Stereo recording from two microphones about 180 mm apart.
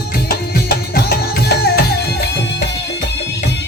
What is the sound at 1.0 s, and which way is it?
Music, 60° left (ahead or behind).